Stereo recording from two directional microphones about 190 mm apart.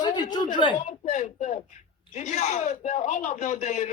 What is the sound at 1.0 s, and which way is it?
Speech, 40° left (ahead or behind).